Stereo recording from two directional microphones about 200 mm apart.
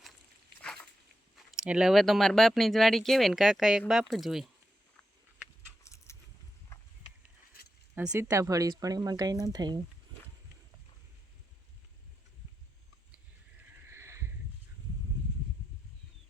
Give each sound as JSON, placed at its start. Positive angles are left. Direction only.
{"t": 0.6, "sound": "a sound", "side_deg": 5}
{"t": 1.4, "sound": "speech", "side_deg": 0}
{"t": 5.8, "sound": "keys jangling", "side_deg": 15}
{"t": 6.7, "sound": "a sound", "side_deg": 15}
{"t": 8.1, "sound": "speech", "side_deg": -15}
{"t": 13.9, "sound": "horse", "side_deg": -15}